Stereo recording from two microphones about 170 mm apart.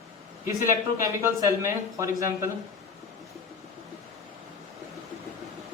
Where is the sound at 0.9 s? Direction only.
15° right (ahead or behind).